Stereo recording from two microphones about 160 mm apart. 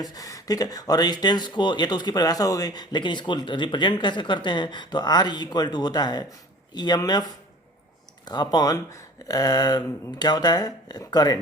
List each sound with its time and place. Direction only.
0.0 s speech: 20° left (ahead or behind)